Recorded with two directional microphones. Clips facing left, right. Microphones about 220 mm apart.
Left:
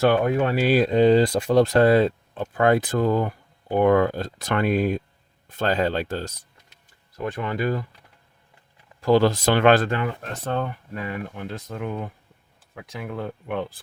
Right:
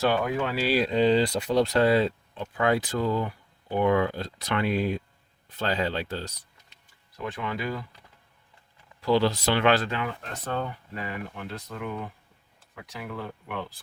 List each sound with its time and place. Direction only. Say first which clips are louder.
0.0 s speech: left 6 dB; 50° left (ahead or behind)
9.0 s speech: left 5 dB; 50° left (ahead or behind)
13.0 s speech: left 5 dB; 50° left (ahead or behind)